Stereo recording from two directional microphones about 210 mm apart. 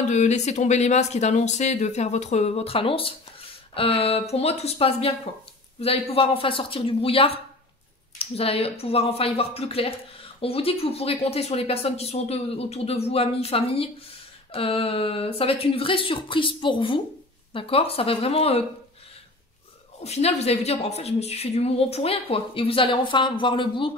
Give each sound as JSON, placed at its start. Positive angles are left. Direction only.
{"t": 0.1, "sound": "speech", "side_deg": 35}
{"t": 20.0, "sound": "speech", "side_deg": 30}